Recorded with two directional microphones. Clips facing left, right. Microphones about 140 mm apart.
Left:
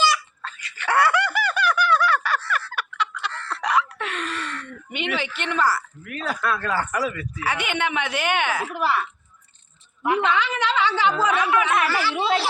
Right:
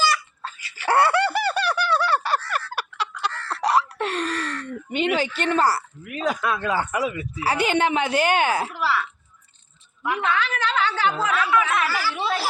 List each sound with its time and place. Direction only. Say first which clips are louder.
0.4 s toothbrush: right 4 dB; 30° right (ahead or behind)
6.1 s speech: right 2 dB; 15° right (ahead or behind)
7.4 s a woman's voice: right 5 dB; 35° right (ahead or behind)
8.7 s a woman's voice: left 1 dB; 20° left (ahead or behind)